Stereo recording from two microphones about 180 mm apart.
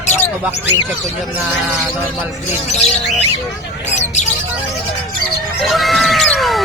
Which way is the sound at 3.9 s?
40° left (ahead or behind).